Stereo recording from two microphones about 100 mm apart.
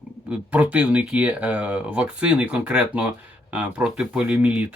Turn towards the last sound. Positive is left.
turn(degrees=-15)  # may be behind; listen again after turning